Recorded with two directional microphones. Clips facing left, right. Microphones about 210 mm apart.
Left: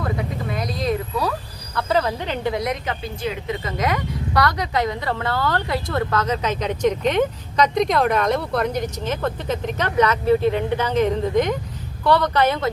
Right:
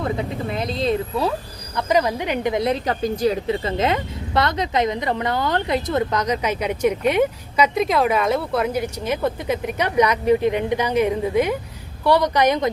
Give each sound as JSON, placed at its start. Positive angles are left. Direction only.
{"t": 0.0, "sound": "vehicle", "side_deg": -25}
{"t": 1.7, "sound": "speech", "side_deg": -15}